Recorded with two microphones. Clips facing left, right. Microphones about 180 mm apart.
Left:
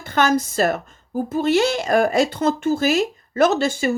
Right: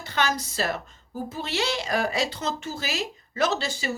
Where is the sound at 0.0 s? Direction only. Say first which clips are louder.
Left 8 dB; 50° left (ahead or behind).